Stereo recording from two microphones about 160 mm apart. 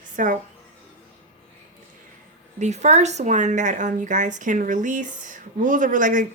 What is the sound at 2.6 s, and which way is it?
A woman's voice, 45° right (ahead or behind).